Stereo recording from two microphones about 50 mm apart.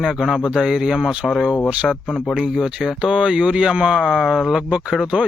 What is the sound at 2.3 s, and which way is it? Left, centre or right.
Speech, centre.